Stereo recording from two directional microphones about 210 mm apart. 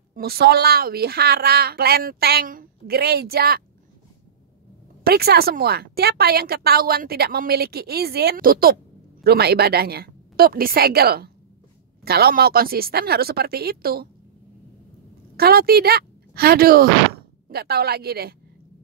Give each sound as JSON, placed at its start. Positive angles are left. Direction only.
{"t": 0.1, "sound": "a woman's voice", "side_deg": -45}
{"t": 5.0, "sound": "a woman's voice", "side_deg": -50}
{"t": 15.3, "sound": "a woman's voice", "side_deg": -45}